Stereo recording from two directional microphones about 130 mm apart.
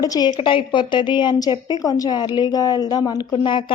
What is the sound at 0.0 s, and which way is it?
A woman's voice, 30° left (ahead or behind).